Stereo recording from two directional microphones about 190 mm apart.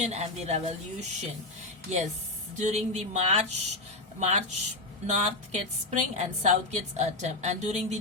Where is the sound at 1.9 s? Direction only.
40° right (ahead or behind).